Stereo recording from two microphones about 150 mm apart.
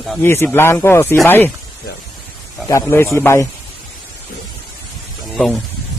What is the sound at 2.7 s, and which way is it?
Speech, 15° left (ahead or behind).